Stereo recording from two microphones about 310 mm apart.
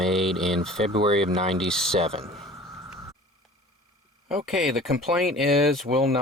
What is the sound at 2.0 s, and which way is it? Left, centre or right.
Speech, centre.